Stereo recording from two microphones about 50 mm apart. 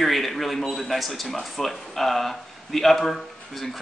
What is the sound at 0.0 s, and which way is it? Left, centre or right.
A man's voice, centre.